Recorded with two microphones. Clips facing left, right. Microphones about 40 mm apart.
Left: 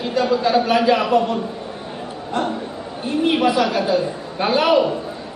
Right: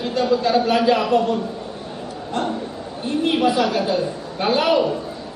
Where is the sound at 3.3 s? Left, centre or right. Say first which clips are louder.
Even; centre.